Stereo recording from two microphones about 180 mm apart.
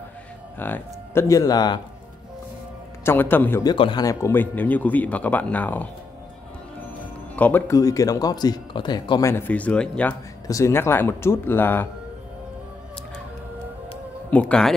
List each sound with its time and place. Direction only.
0.6 s speech: 10° left (ahead or behind)
3.0 s speech: 10° left (ahead or behind)
3.6 s speech: 25° left (ahead or behind); by 5.9 s 10° left (ahead or behind)
7.3 s speech: 10° left (ahead or behind)
9.3 s speech: 10° left (ahead or behind)
10.4 s speech: 15° left (ahead or behind)
14.3 s speech: 5° left (ahead or behind)